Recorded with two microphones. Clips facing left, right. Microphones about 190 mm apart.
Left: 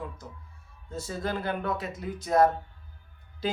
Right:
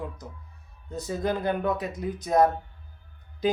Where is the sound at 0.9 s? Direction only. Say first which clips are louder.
Right 4 dB; 20° right (ahead or behind).